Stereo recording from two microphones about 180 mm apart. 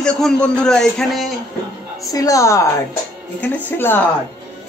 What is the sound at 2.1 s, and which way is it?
A woman's voice, 20° left (ahead or behind).